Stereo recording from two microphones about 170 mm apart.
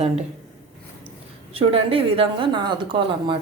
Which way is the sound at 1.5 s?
35° right (ahead or behind).